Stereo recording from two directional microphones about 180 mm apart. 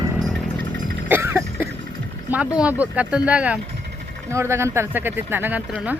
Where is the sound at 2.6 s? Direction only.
5° right (ahead or behind).